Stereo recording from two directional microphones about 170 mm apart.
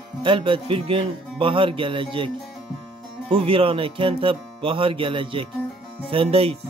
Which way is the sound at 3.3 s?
30° right (ahead or behind).